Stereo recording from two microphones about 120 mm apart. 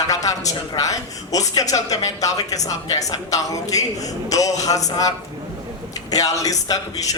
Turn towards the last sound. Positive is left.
turn(degrees=30)  # may be behind; listen again after turning